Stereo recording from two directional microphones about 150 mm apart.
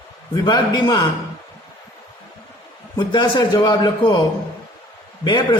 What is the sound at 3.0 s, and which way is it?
A man's voice, 30° left (ahead or behind).